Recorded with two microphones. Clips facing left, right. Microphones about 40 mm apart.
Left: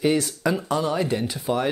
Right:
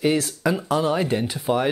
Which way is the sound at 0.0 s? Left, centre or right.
Centre.